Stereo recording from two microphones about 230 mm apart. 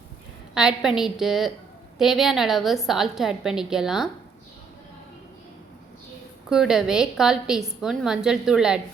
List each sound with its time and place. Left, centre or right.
0.5 s a woman's voice: centre
6.5 s a woman's voice: centre